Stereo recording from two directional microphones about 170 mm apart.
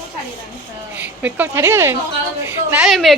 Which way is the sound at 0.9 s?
10° right (ahead or behind).